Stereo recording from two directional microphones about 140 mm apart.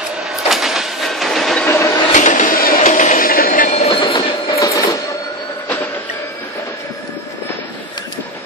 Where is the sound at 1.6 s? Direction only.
20° left (ahead or behind).